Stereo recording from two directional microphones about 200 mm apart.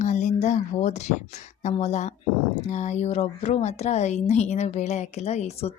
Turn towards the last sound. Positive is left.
turn(degrees=30)  # may be behind; listen again after turning